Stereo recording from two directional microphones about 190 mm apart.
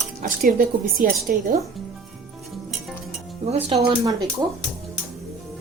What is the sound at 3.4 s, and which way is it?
Speech, 35° right (ahead or behind).